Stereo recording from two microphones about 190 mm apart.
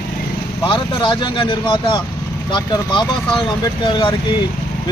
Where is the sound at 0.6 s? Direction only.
25° left (ahead or behind).